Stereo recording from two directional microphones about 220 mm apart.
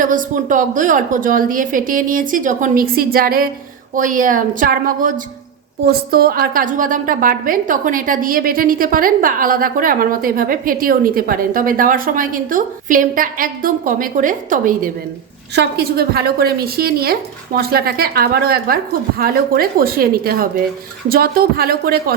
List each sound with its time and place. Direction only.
0.0 s a woman's voice: 35° right (ahead or behind)